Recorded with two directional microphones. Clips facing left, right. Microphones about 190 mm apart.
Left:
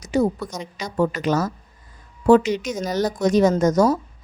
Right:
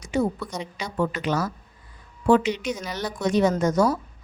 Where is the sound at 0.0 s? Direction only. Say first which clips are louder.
Left 4 dB; 40° left (ahead or behind).